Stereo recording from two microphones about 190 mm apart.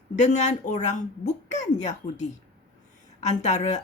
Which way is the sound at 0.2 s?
40° left (ahead or behind).